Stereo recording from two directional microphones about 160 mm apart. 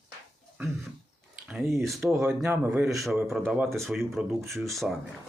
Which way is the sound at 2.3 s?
5° right (ahead or behind).